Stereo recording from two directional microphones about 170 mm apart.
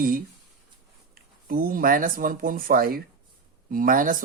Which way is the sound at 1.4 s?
60° right (ahead or behind).